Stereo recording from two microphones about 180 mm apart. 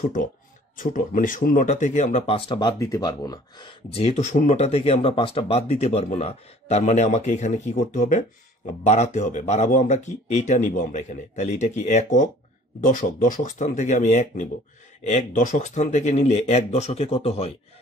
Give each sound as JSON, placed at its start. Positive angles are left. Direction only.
{"t": 0.0, "sound": "speech", "side_deg": 50}